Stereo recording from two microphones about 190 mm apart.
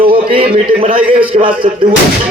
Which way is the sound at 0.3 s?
30° right (ahead or behind).